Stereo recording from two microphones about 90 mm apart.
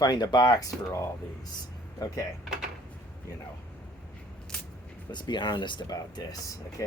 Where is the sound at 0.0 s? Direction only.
50° left (ahead or behind).